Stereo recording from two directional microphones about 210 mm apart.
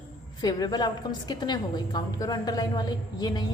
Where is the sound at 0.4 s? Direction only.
20° left (ahead or behind).